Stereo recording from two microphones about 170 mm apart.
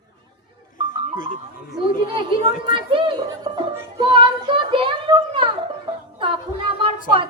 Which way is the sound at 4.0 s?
30° right (ahead or behind).